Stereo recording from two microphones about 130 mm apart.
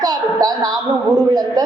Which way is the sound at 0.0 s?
30° right (ahead or behind).